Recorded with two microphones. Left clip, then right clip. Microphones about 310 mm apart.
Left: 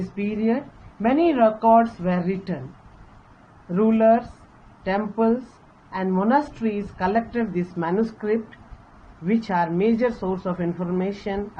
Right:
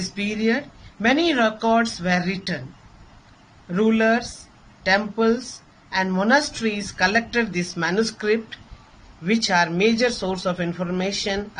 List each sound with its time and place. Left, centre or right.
0.2 s a woman's voice: right
3.8 s a woman's voice: right